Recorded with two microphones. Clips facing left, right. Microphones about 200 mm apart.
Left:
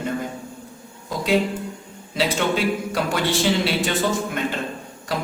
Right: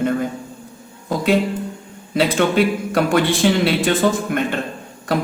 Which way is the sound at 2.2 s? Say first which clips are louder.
Right 6 dB; 55° right (ahead or behind).